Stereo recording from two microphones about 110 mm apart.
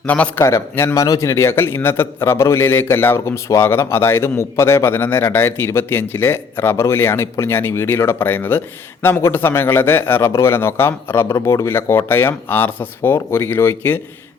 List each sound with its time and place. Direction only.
0.0 s a man's voice: 10° left (ahead or behind)
0.4 s a man's voice: 25° left (ahead or behind)